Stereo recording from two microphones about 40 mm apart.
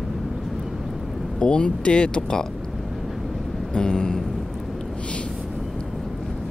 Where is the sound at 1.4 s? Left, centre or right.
Left.